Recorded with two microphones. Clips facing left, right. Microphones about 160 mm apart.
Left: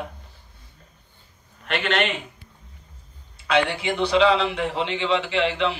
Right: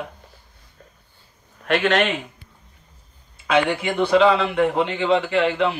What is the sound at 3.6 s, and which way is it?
A man's voice, 50° right (ahead or behind).